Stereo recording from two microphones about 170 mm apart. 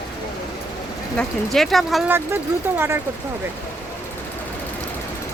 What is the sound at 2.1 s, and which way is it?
Speech, 15° right (ahead or behind).